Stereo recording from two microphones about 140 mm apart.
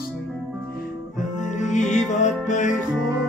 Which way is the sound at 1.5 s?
60° left (ahead or behind).